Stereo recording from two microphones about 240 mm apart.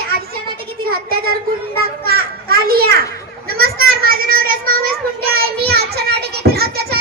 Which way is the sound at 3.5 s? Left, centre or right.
Right.